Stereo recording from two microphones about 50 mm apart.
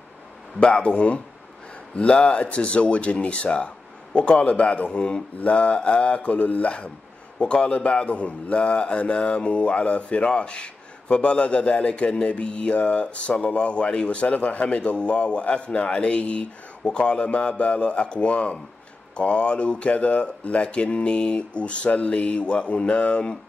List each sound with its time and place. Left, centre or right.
0.6 s speech: left